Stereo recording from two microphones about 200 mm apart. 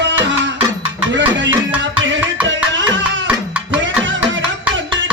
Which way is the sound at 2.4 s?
65° right (ahead or behind).